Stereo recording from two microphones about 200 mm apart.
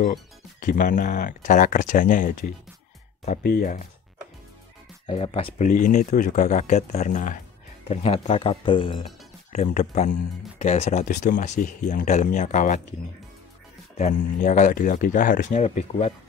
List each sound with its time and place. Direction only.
0.0 s speech: 40° left (ahead or behind)
5.0 s speech: 30° left (ahead or behind)
5.7 s speech: 40° left (ahead or behind)
13.9 s speech: 35° left (ahead or behind)